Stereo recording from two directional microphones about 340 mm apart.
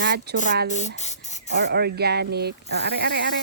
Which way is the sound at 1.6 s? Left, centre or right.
Right.